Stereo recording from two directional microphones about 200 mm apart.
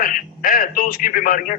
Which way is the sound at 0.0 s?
45° left (ahead or behind).